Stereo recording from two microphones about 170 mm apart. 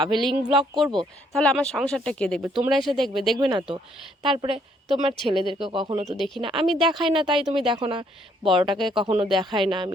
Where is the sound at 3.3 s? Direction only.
25° right (ahead or behind).